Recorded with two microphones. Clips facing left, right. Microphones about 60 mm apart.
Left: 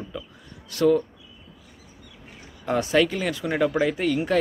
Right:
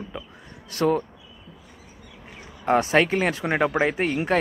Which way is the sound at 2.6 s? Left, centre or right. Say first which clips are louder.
Right 2 dB; right.